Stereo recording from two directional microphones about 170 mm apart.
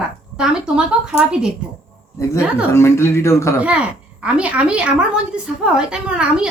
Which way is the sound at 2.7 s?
15° left (ahead or behind).